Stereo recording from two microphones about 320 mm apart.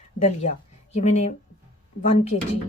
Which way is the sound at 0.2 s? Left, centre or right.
Left.